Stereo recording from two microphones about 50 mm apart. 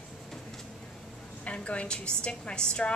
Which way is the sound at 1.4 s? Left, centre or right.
Left.